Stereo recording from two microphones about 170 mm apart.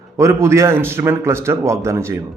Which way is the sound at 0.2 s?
15° right (ahead or behind).